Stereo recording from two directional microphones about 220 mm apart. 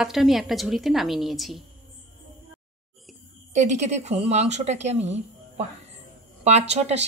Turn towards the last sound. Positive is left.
turn(degrees=-30)  # may be behind; listen again after turning